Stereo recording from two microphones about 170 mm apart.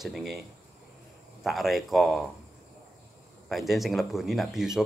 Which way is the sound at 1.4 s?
Centre (ahead or behind).